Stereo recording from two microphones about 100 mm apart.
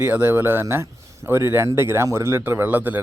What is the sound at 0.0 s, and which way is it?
A man's voice, 20° right (ahead or behind).